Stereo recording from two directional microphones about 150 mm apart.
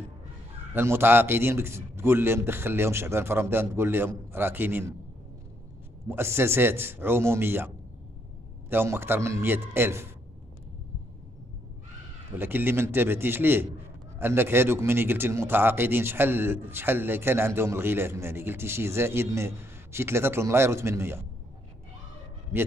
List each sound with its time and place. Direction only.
0.7 s a man's voice: 15° right (ahead or behind)
6.0 s a man's voice: 15° right (ahead or behind)
12.3 s a man's voice: 15° right (ahead or behind)